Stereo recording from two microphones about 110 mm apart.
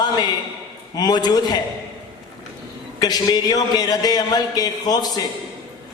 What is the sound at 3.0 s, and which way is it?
A man's voice, 35° left (ahead or behind).